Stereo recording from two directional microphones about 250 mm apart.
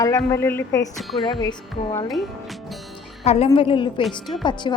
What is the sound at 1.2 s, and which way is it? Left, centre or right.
Speech, centre.